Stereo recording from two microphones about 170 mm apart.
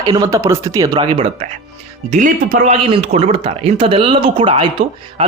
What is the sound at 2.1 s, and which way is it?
A man's voice, 50° right (ahead or behind).